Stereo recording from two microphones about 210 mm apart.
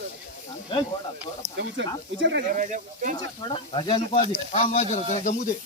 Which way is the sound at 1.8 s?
60° right (ahead or behind).